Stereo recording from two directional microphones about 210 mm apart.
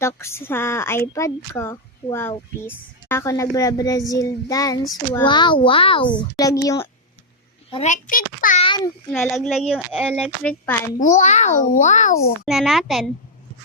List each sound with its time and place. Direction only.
0.0 s speech: 10° left (ahead or behind)
7.7 s a child's voice: 30° left (ahead or behind)
8.6 s a child's voice: 20° left (ahead or behind)
9.1 s speech: centre (ahead or behind)
11.0 s a child's voice: 35° left (ahead or behind)
12.5 s speech: centre (ahead or behind)